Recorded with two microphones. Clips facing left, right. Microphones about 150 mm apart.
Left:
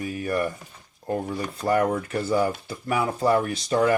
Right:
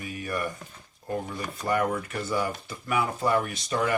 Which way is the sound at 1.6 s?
30° left (ahead or behind).